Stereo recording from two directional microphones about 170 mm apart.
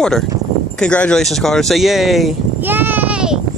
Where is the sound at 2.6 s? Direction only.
10° right (ahead or behind).